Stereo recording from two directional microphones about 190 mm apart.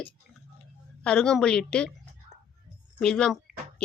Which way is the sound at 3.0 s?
5° left (ahead or behind).